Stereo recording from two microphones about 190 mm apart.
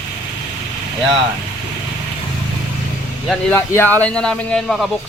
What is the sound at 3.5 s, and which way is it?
Speech, 10° left (ahead or behind).